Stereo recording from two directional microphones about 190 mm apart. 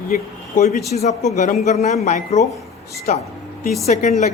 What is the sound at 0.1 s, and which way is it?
A woman's voice, 45° left (ahead or behind).